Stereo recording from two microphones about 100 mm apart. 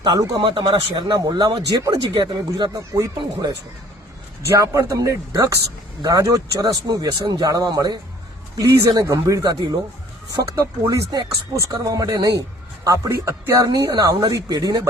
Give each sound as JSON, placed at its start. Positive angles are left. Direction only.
{"t": 0.2, "sound": "speech", "side_deg": -35}
{"t": 0.4, "sound": "speech", "side_deg": -55}
{"t": 2.6, "sound": "speech", "side_deg": -30}
{"t": 4.5, "sound": "speech", "side_deg": -30}